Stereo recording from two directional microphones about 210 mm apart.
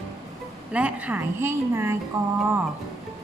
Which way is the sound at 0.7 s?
5° right (ahead or behind).